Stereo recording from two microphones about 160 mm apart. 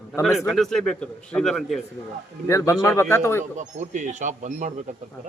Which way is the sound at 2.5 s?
20° left (ahead or behind).